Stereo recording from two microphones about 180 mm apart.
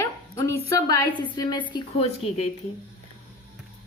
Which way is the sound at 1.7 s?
35° left (ahead or behind).